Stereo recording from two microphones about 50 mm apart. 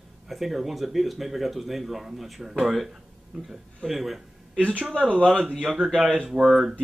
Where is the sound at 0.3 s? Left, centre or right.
Centre.